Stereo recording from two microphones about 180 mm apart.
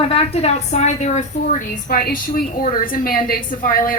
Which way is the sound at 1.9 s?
55° left (ahead or behind).